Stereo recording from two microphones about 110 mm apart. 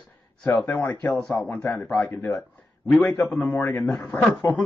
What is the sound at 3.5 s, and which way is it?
Speech, 25° left (ahead or behind).